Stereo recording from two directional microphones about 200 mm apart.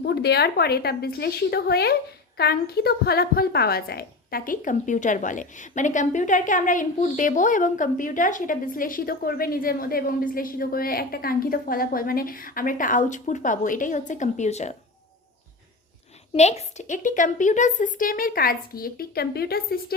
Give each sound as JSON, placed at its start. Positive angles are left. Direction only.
{"t": 0.0, "sound": "a woman's voice", "side_deg": 55}
{"t": 16.3, "sound": "a woman's voice", "side_deg": 35}